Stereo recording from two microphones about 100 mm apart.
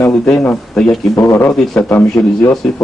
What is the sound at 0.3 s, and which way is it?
Speech, 25° left (ahead or behind).